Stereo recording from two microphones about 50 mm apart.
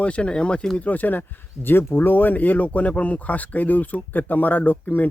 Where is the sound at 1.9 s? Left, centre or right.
Left.